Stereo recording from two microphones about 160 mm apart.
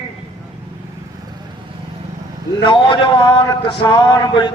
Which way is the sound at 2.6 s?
30° left (ahead or behind).